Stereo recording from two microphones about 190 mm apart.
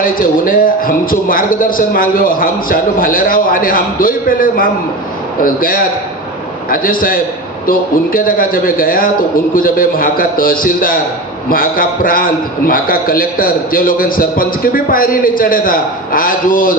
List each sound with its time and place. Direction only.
0.0 s a man's voice: 45° left (ahead or behind)